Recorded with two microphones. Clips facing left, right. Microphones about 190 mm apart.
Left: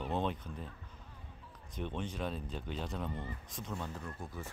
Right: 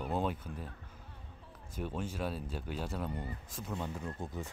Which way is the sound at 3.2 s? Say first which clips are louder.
Right 1 dB; 35° right (ahead or behind).